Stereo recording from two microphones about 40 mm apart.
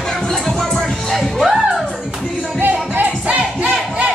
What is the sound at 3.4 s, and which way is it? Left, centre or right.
Crowd, right.